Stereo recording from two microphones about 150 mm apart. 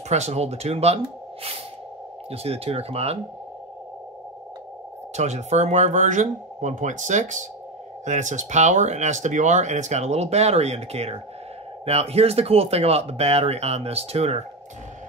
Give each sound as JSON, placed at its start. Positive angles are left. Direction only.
{"t": 0.1, "sound": "speech", "side_deg": -45}
{"t": 5.1, "sound": "speech", "side_deg": -50}